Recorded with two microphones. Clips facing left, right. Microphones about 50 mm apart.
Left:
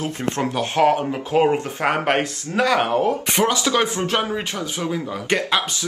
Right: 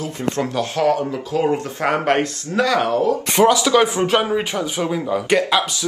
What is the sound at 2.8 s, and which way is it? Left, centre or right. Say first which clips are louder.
Speech: right 1 dB; left.